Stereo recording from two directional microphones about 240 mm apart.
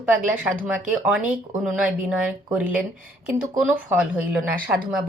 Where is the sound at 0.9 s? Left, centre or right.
Centre.